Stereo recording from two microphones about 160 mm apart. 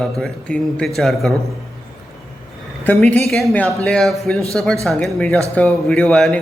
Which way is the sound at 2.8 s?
10° left (ahead or behind).